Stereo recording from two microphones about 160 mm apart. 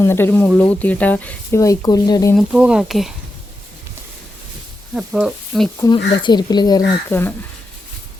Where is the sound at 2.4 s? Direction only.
5° right (ahead or behind).